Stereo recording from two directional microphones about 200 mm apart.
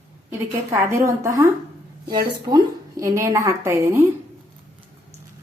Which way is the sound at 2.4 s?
20° right (ahead or behind).